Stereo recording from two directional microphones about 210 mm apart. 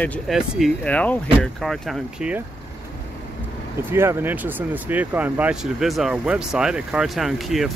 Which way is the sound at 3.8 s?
10° right (ahead or behind).